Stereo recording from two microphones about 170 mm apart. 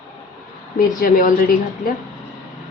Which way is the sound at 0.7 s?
55° left (ahead or behind).